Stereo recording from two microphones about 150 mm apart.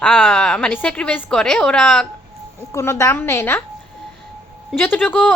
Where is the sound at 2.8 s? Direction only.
20° left (ahead or behind).